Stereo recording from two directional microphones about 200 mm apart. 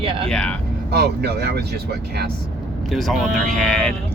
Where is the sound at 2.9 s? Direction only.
Centre (ahead or behind).